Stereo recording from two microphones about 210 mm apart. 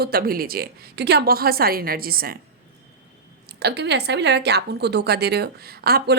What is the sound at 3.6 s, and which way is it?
A woman's voice, 50° right (ahead or behind).